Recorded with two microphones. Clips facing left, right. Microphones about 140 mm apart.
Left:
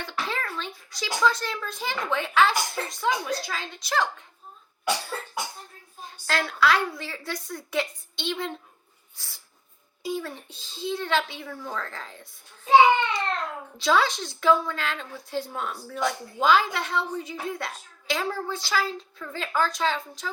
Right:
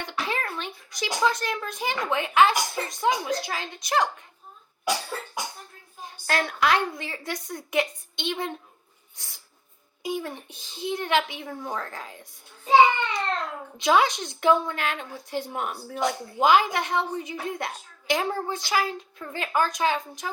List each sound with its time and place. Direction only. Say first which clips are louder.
0.0 s a sound: right 1 dB; 15° right (ahead or behind)
0.5 s a child's voice: even; 20° right (ahead or behind)
6.2 s a woman's voice: even; 20° right (ahead or behind)
13.7 s a woman's voice: right 2 dB; 20° right (ahead or behind)